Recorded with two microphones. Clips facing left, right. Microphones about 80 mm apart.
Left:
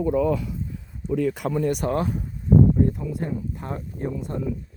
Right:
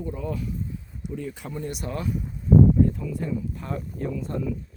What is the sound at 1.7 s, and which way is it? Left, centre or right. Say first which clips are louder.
Speech: left 6 dB; left.